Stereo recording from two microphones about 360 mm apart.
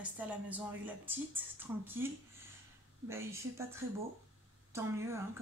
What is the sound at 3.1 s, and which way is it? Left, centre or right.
Speech, centre.